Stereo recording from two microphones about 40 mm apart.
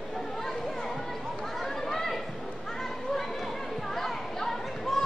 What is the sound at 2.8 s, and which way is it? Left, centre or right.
Children playing, centre.